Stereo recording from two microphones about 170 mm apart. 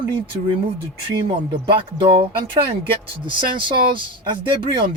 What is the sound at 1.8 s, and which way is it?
Speech, 30° right (ahead or behind).